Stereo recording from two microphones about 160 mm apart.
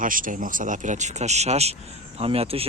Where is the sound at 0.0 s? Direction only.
55° right (ahead or behind).